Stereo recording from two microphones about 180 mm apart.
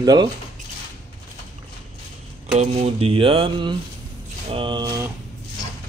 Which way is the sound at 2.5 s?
35° right (ahead or behind).